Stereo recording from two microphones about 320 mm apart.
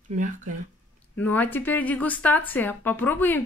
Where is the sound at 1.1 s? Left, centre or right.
Centre.